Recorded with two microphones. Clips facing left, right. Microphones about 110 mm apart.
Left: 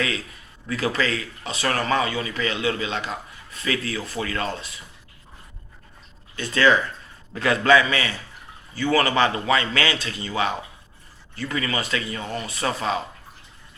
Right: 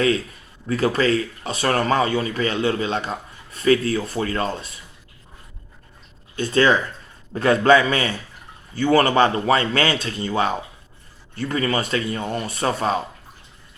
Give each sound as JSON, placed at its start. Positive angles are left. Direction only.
{"t": 0.7, "sound": "speech", "side_deg": -35}
{"t": 6.3, "sound": "speech", "side_deg": -40}
{"t": 8.8, "sound": "a man's voice", "side_deg": -50}